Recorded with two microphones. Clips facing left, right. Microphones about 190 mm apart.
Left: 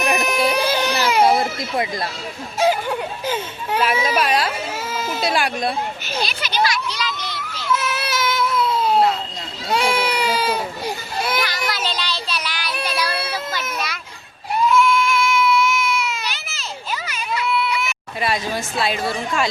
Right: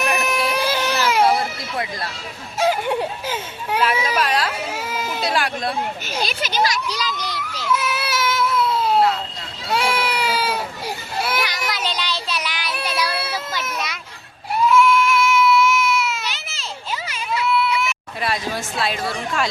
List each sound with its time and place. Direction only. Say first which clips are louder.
0.2 s baby cry: left 2 dB; centre (ahead or behind)
1.2 s a sound: left 4 dB; 20° left (ahead or behind)
2.6 s a child's voice: even; centre (ahead or behind)
4.0 s speech: left 2 dB; 10° left (ahead or behind)
4.7 s a sound: left 1 dB; 15° right (ahead or behind)
5.2 s speech: left 2 dB; 15° left (ahead or behind)
6.2 s a child's voice: right 1 dB; 45° right (ahead or behind)
7.7 s baby cry: even; 10° right (ahead or behind)
11.7 s child singing: even; 20° right (ahead or behind)
12.7 s child singing: left 1 dB; centre (ahead or behind)
14.7 s baby cry: right 2 dB; 5° right (ahead or behind)
16.3 s a sound: left 1 dB; 25° right (ahead or behind)
17.5 s speech: right 3 dB; centre (ahead or behind)